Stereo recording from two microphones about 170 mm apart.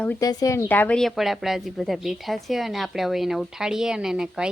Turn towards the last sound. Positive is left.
turn(degrees=-5)  # may be behind; listen again after turning